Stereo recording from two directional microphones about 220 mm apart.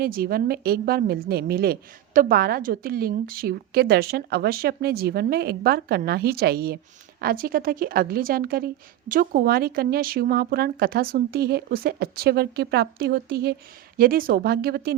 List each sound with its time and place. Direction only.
0.0 s a woman's voice: 40° right (ahead or behind)